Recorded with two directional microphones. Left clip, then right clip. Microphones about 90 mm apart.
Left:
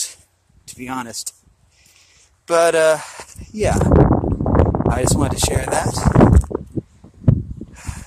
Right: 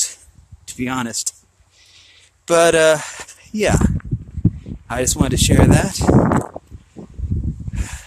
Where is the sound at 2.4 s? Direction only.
35° right (ahead or behind).